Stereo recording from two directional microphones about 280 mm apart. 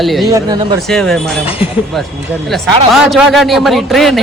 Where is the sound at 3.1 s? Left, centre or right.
Centre.